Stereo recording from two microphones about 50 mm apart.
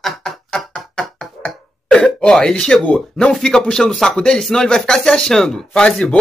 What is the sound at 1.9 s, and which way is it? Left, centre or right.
Speech, centre.